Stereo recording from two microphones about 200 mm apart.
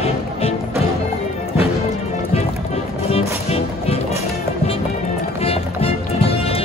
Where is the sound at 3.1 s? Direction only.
30° left (ahead or behind).